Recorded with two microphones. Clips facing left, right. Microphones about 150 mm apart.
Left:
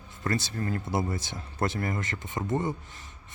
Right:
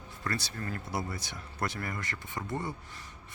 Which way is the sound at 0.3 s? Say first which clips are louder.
Left 6 dB; 25° left (ahead or behind).